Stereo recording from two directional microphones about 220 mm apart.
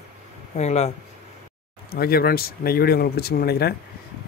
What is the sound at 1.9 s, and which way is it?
Speech, 45° left (ahead or behind).